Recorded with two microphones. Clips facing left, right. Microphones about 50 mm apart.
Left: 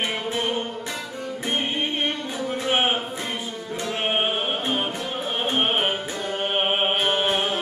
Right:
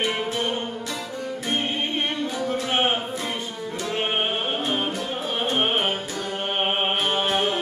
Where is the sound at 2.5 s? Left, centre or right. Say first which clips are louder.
Left 4 dB; left.